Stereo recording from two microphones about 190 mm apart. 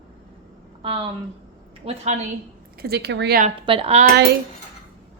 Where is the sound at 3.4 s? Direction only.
30° right (ahead or behind).